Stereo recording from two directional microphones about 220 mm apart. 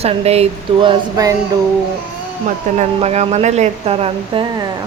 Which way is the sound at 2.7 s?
30° right (ahead or behind).